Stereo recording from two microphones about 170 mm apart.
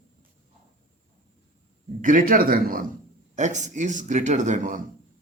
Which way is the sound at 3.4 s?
45° right (ahead or behind).